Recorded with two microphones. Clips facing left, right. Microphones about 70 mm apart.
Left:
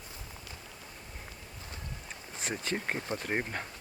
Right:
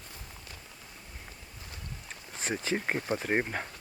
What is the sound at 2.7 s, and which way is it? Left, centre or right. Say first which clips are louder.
Speech: right 3 dB; centre.